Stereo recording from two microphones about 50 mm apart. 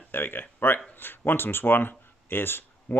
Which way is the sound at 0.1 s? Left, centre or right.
Left.